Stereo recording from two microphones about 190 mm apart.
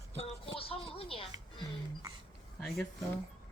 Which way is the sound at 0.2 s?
30° left (ahead or behind).